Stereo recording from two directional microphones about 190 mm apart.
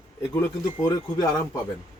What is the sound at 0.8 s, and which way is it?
Speech, 20° left (ahead or behind).